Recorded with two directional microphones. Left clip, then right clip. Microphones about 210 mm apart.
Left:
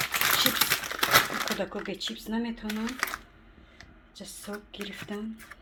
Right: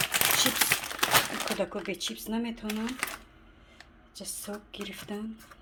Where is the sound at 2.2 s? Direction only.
Centre (ahead or behind).